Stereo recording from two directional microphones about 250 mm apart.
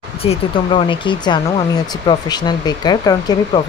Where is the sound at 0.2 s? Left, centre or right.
Left.